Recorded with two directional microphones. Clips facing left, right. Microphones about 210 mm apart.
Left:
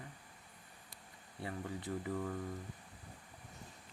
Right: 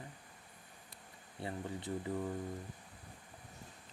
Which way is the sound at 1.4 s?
25° right (ahead or behind).